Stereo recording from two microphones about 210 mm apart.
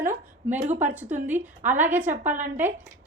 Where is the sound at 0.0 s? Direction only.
10° right (ahead or behind).